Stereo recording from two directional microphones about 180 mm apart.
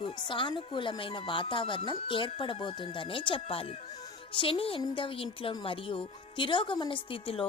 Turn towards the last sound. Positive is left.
turn(degrees=30)  # may be behind; listen again after turning